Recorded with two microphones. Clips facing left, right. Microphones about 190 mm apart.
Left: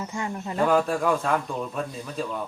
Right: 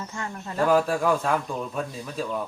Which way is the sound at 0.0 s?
15° left (ahead or behind).